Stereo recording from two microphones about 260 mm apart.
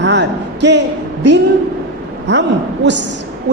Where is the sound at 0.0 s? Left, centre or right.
Right.